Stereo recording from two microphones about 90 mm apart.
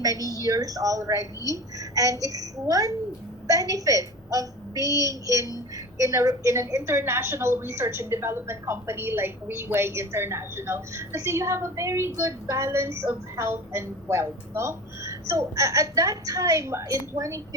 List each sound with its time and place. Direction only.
0.0 s a woman's voice: 40° right (ahead or behind)
1.2 s a woman's voice: 40° left (ahead or behind)
1.8 s a woman's voice: 40° right (ahead or behind)